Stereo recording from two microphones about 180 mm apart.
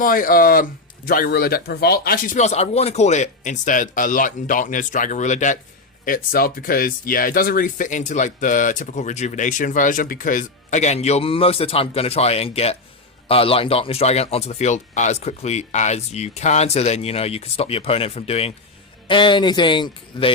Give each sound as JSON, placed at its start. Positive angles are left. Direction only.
{"t": 0.0, "sound": "speech", "side_deg": 50}
{"t": 6.1, "sound": "speech", "side_deg": 55}